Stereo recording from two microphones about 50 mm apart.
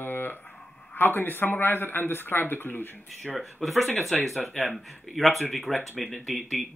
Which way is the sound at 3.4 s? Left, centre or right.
Centre.